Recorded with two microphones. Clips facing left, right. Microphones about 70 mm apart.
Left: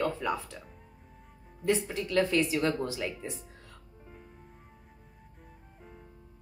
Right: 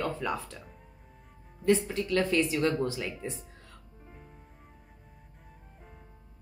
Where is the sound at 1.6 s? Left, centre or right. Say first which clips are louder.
Right 3 dB; centre.